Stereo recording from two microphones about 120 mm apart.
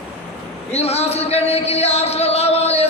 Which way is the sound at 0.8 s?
60° left (ahead or behind).